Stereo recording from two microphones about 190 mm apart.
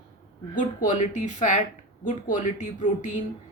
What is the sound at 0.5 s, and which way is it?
A woman's voice, 40° left (ahead or behind).